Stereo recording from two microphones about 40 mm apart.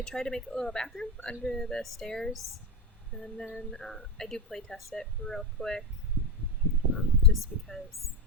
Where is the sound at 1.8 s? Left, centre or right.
Centre.